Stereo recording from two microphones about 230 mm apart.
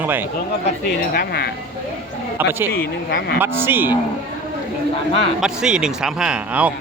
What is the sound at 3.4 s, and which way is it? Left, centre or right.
Speech, centre.